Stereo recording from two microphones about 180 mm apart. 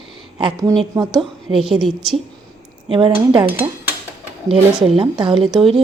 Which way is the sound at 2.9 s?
30° right (ahead or behind).